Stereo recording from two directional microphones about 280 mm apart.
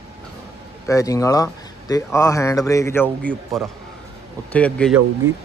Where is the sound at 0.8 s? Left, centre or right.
Centre.